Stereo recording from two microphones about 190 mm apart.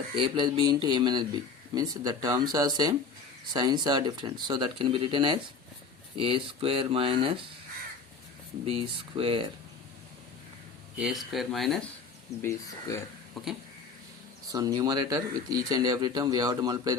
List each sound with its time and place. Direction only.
0.2 s speech: 25° right (ahead or behind)
8.6 s speech: 30° right (ahead or behind)
10.9 s speech: 5° right (ahead or behind)
12.4 s speech: 15° left (ahead or behind)
13.4 s speech: centre (ahead or behind)
14.5 s speech: 20° right (ahead or behind)